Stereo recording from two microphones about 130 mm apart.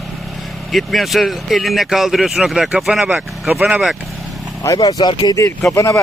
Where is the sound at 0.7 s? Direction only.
Centre (ahead or behind).